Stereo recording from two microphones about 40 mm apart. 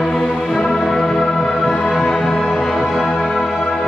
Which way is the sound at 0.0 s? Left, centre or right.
Centre.